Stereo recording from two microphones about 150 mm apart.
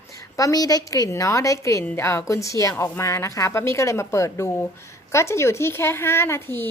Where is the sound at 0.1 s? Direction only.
20° left (ahead or behind).